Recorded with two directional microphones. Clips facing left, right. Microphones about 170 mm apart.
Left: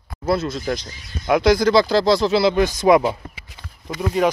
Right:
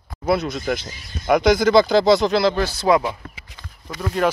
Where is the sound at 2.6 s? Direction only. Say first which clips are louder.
Left 3 dB; 15° left (ahead or behind).